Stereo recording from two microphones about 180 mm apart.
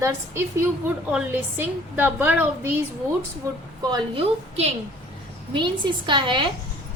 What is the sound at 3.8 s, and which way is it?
A woman's voice, 20° right (ahead or behind).